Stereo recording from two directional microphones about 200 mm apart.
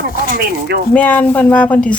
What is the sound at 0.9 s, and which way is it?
Speech, 10° left (ahead or behind).